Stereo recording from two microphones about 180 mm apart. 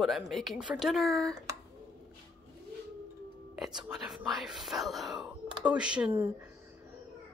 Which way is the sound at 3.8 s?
5° right (ahead or behind).